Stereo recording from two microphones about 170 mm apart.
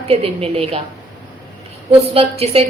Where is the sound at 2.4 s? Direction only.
35° right (ahead or behind).